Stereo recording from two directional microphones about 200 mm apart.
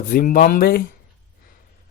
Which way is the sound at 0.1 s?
45° left (ahead or behind).